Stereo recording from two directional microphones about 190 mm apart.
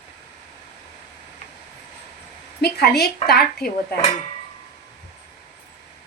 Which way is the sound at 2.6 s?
55° left (ahead or behind).